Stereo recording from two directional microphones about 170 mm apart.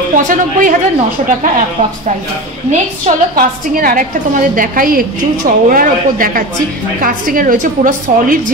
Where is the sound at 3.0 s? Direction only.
55° right (ahead or behind).